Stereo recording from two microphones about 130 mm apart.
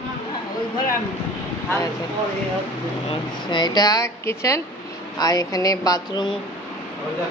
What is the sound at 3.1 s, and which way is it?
Speech, 35° left (ahead or behind).